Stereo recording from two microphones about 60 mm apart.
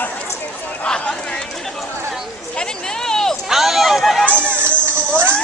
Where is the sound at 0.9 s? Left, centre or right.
Centre.